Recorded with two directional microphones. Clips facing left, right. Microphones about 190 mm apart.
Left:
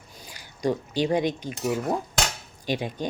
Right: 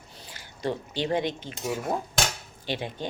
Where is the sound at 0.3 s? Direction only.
15° left (ahead or behind).